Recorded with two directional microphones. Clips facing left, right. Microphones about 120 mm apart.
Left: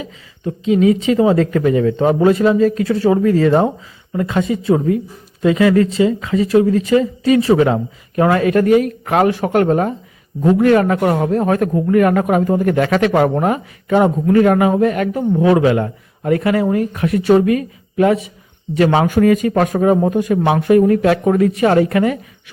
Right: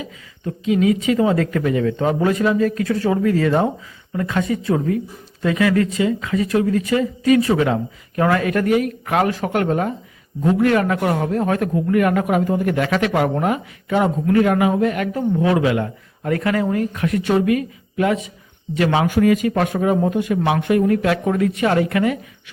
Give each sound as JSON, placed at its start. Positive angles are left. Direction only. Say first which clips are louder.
{"t": 0.0, "sound": "a woman's voice", "louder": "left 4 dB", "side_deg": 25}
{"t": 3.1, "sound": "a man's voice", "louder": "left 5 dB", "side_deg": 35}
{"t": 4.1, "sound": "a woman's voice", "louder": "left 3 dB", "side_deg": 20}
{"t": 16.2, "sound": "a man's voice", "louder": "left 4 dB", "side_deg": 25}